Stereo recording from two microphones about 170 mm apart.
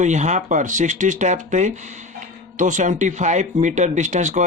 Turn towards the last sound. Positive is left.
turn(degrees=-45)  # may be behind; listen again after turning